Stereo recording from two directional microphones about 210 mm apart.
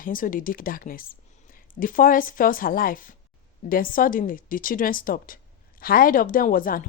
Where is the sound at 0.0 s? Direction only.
40° left (ahead or behind).